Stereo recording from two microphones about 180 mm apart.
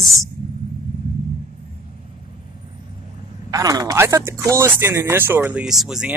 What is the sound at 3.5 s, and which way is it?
Speech, 20° right (ahead or behind).